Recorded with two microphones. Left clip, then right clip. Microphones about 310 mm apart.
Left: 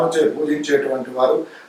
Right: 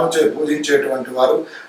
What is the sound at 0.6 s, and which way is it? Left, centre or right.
Speech, centre.